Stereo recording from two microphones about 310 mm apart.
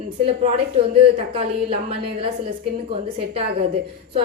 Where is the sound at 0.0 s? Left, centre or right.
Centre.